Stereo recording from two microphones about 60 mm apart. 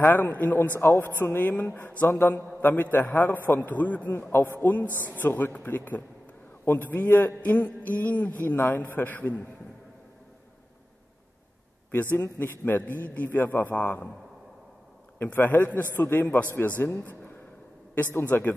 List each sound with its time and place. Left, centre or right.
0.1 s a man's voice: left
0.7 s a man's voice: left
4.3 s a man's voice: left
11.9 s a man's voice: left
15.3 s a man's voice: left